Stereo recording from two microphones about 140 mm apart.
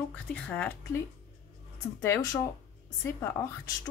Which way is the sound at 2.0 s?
20° left (ahead or behind).